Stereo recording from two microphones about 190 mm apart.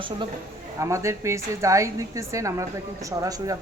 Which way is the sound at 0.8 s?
15° right (ahead or behind).